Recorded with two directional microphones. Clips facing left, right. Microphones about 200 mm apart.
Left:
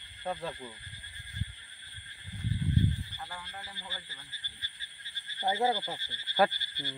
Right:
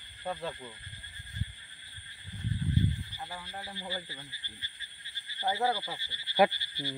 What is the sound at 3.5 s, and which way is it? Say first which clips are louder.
Speech: right 7 dB; 40° right (ahead or behind).